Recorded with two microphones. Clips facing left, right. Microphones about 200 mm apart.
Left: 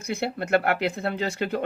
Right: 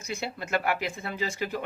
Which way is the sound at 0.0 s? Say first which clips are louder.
Left 6 dB; 60° left (ahead or behind).